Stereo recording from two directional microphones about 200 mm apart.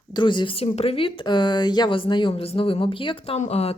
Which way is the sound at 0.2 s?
25° left (ahead or behind).